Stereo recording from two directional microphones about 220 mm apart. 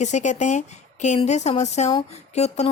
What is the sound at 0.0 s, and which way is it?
A woman's voice, 30° left (ahead or behind).